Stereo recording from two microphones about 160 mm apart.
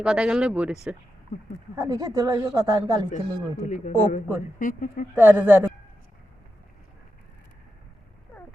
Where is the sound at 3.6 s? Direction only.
50° left (ahead or behind).